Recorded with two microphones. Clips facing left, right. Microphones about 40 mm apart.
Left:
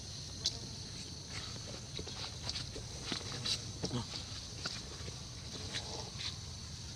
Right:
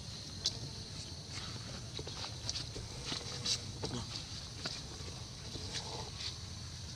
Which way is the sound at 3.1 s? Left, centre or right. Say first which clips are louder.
Left 1 dB; centre.